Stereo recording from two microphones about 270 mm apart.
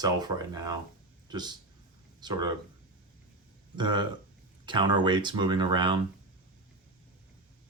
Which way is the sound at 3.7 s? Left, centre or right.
Centre.